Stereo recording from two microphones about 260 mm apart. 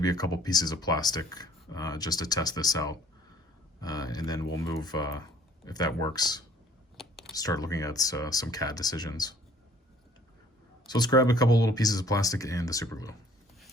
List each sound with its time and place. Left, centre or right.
0.0 s speech: centre
6.9 s typing: centre
7.3 s speech: centre
10.8 s speech: centre